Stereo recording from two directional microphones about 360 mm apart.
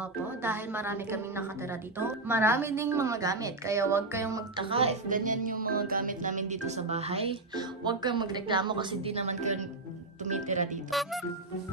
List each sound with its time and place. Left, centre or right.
0.0 s a woman's voice: centre
10.9 s speech: centre